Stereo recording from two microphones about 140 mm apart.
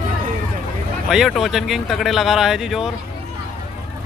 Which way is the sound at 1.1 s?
Centre (ahead or behind).